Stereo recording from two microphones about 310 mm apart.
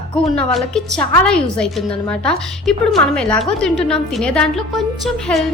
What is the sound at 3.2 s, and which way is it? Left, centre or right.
Speech, centre.